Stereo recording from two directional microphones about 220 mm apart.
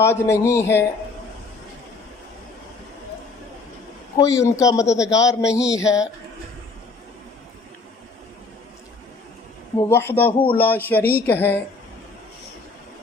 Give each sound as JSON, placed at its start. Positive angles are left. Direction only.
{"t": 0.0, "sound": "speech", "side_deg": 10}
{"t": 4.2, "sound": "speech", "side_deg": 15}
{"t": 9.7, "sound": "speech", "side_deg": 10}